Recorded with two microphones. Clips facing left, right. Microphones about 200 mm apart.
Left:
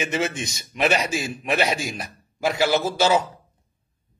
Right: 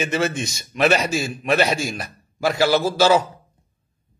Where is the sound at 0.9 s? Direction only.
40° right (ahead or behind).